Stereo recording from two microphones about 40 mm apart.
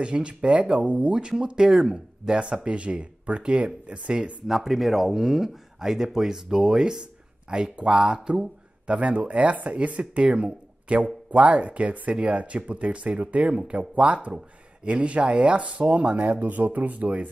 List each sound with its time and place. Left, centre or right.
0.0 s speech: right
4.1 s speech: centre
8.8 s speech: right
16.3 s speech: right